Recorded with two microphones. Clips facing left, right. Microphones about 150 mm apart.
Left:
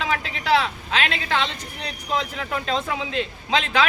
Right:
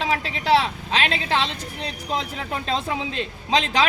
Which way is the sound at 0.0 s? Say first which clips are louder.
Right 1 dB; 35° right (ahead or behind).